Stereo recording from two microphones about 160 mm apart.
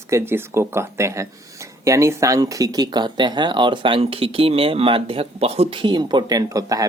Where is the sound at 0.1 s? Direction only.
15° right (ahead or behind).